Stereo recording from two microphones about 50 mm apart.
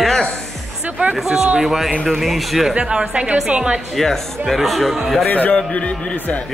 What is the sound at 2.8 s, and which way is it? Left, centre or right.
A woman's voice, centre.